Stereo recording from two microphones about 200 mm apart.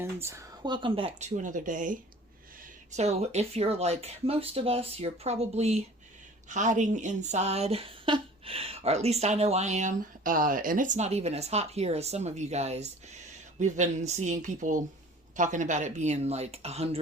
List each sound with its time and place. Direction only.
0.0 s speech: 15° right (ahead or behind)
1.4 s speech: 40° right (ahead or behind)